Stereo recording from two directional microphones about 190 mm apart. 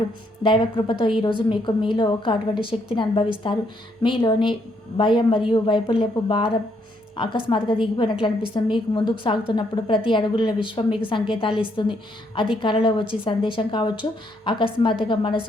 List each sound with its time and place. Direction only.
0.4 s a woman's voice: 25° left (ahead or behind)